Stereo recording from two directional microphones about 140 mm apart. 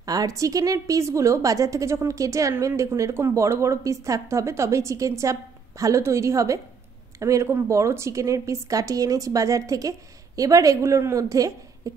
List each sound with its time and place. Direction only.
0.0 s a woman's voice: 25° right (ahead or behind)